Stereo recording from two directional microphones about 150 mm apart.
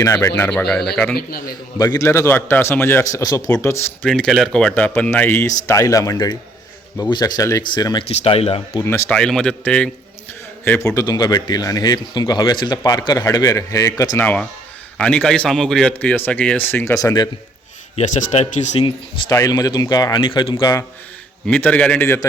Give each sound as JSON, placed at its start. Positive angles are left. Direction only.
{"t": 0.0, "sound": "speech", "side_deg": 20}
{"t": 1.1, "sound": "a man's voice", "side_deg": 85}
{"t": 1.8, "sound": "speech", "side_deg": 25}
{"t": 4.0, "sound": "speech", "side_deg": 0}
{"t": 8.0, "sound": "speech", "side_deg": 40}
{"t": 8.8, "sound": "speech", "side_deg": 15}
{"t": 10.9, "sound": "speech", "side_deg": 25}
{"t": 14.9, "sound": "speech", "side_deg": 5}
{"t": 17.9, "sound": "speech", "side_deg": 55}
{"t": 19.3, "sound": "speech", "side_deg": 25}
{"t": 21.4, "sound": "speech", "side_deg": 10}